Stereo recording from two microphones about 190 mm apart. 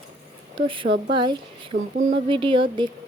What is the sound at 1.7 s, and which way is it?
Speech, 55° right (ahead or behind).